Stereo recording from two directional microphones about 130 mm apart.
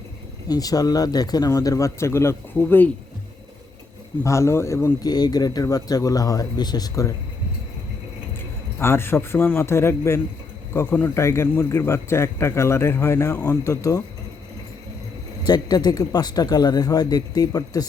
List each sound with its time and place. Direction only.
0.4 s speech: 30° left (ahead or behind)
4.2 s speech: 20° left (ahead or behind)
8.8 s speech: 20° left (ahead or behind)
15.4 s speech: 30° left (ahead or behind)